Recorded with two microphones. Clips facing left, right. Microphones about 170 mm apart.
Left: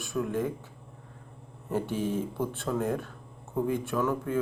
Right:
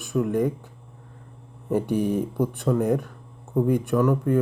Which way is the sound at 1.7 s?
15° right (ahead or behind).